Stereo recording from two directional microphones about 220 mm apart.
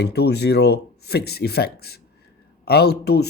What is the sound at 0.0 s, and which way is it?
Speech, 50° left (ahead or behind).